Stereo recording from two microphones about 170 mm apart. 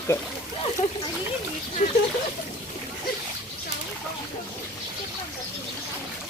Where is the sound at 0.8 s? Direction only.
40° left (ahead or behind).